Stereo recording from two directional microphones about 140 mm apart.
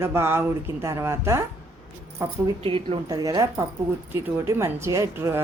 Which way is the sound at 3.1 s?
25° right (ahead or behind).